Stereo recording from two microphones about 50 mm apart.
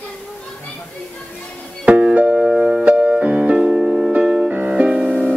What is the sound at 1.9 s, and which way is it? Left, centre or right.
Music, right.